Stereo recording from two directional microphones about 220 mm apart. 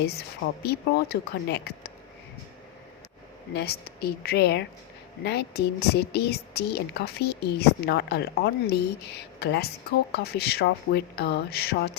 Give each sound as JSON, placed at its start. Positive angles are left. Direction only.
{"t": 0.0, "sound": "a woman's voice", "side_deg": 45}
{"t": 3.5, "sound": "a woman's voice", "side_deg": 45}